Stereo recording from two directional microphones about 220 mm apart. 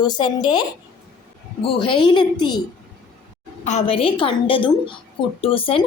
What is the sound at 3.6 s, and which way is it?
A woman's voice, 30° left (ahead or behind).